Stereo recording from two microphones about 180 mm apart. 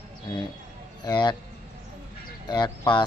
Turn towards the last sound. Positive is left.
turn(degrees=25)  # may be behind; listen again after turning